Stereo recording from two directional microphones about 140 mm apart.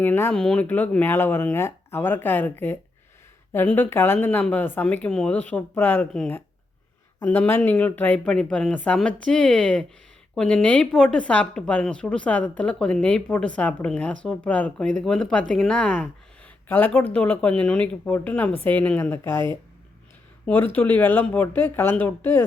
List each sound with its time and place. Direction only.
0.0 s speech: 15° left (ahead or behind)
20.7 s speech: 15° left (ahead or behind)